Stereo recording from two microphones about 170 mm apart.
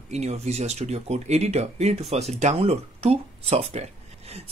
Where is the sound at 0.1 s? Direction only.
40° right (ahead or behind).